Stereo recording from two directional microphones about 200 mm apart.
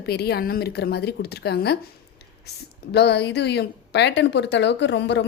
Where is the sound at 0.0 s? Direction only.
55° left (ahead or behind).